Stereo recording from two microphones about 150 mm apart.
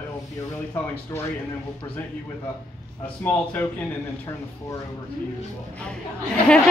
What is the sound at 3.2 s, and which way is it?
Speech, 10° left (ahead or behind).